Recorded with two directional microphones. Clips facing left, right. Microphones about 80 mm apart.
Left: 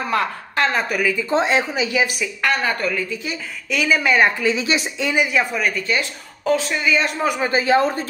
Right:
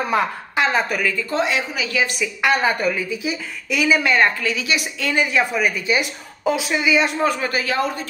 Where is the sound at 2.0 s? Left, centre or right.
Centre.